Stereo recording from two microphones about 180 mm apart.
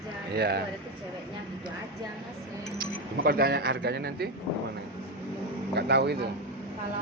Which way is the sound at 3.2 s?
55° right (ahead or behind).